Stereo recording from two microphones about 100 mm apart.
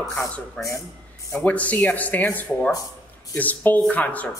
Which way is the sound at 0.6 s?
15° left (ahead or behind).